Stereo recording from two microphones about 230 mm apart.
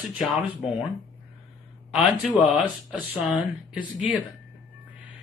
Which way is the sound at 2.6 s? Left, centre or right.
Centre.